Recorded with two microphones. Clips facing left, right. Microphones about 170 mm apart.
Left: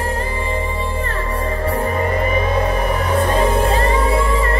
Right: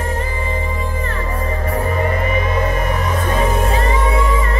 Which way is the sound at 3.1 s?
30° left (ahead or behind).